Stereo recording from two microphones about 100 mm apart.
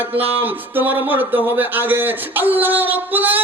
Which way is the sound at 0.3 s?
20° right (ahead or behind).